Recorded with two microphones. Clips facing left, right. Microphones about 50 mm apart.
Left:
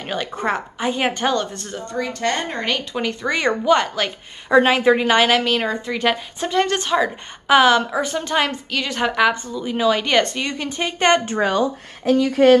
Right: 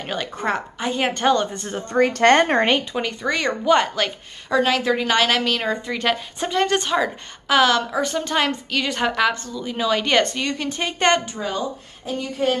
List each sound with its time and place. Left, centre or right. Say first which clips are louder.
0.0 s a woman's voice: left 2 dB; centre
1.5 s a woman's voice: right 2 dB; centre
1.9 s speech: right 8 dB; right
2.9 s a woman's voice: left 1 dB; centre
4.5 s a woman's voice: left 5 dB; left; by 7.1 s centre
7.4 s a woman's voice: left 3 dB; centre
11.2 s speech: left 7 dB; left
12.0 s speech: left 9 dB; left